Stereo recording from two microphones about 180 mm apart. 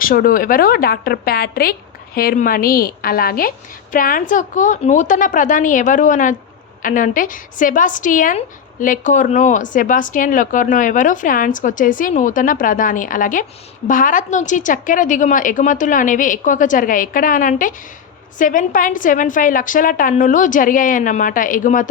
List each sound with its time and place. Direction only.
0.0 s a woman's voice: 55° left (ahead or behind)